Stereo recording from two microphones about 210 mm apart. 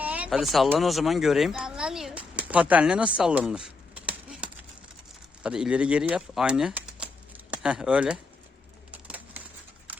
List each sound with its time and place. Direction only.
0.0 s speech: 5° right (ahead or behind)
8.9 s bird: 5° right (ahead or behind)